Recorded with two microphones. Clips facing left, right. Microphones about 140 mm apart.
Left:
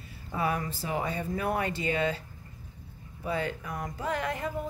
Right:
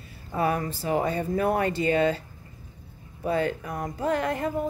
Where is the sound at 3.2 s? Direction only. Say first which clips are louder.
Right 6 dB; 45° right (ahead or behind).